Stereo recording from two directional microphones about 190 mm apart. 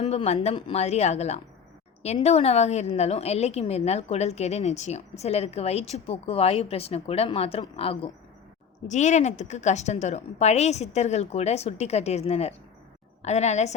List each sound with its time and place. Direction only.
0.0 s a woman's voice: 35° left (ahead or behind)